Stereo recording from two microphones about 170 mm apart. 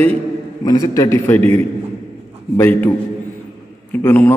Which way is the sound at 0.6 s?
25° left (ahead or behind).